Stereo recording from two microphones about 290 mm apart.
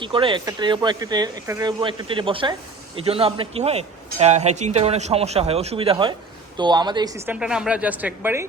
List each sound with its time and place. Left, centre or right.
0.0 s speech: centre